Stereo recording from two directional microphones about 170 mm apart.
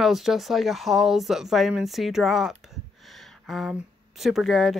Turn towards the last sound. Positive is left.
turn(degrees=0)  # may be behind; listen again after turning